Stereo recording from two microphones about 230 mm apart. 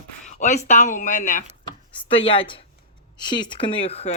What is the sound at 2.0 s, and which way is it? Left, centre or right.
Speech, left.